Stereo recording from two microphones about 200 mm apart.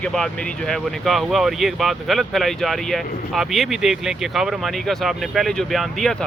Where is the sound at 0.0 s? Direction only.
5° left (ahead or behind).